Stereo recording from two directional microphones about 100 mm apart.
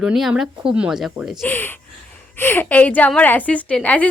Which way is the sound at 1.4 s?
20° left (ahead or behind).